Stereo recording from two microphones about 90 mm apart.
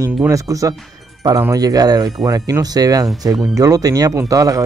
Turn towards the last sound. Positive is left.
turn(degrees=-40)  # may be behind; listen again after turning